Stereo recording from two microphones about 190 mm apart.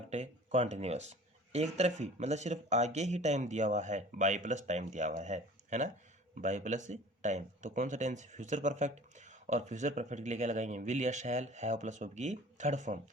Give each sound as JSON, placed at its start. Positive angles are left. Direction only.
{"t": 0.1, "sound": "speech", "side_deg": -35}